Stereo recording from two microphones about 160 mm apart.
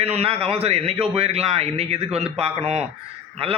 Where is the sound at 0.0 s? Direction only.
40° right (ahead or behind).